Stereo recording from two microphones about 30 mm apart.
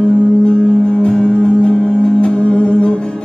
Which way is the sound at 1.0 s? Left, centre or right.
Left.